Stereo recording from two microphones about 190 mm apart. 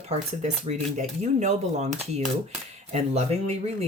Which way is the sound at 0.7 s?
35° right (ahead or behind).